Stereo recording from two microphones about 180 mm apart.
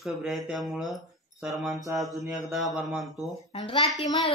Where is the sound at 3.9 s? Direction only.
Centre (ahead or behind).